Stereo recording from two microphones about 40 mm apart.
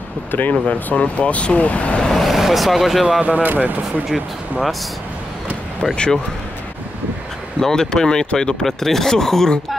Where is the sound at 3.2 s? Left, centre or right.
Right.